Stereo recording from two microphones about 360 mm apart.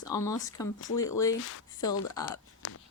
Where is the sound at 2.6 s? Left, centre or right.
Left.